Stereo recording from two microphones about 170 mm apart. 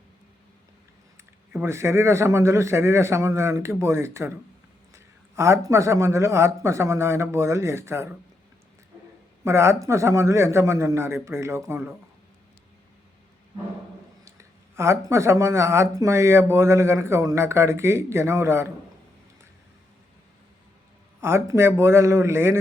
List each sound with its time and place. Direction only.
1.5 s speech: 15° right (ahead or behind)
9.4 s speech: 15° right (ahead or behind)
14.3 s speech: 15° right (ahead or behind)
21.2 s speech: 15° right (ahead or behind)